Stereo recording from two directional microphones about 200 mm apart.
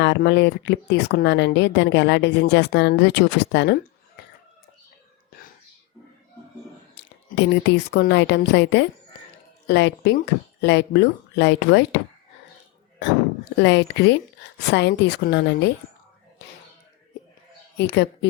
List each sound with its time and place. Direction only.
0.0 s speech: 60° left (ahead or behind)
6.9 s speech: 60° left (ahead or behind)
13.6 s speech: 60° left (ahead or behind)
17.7 s speech: 60° left (ahead or behind)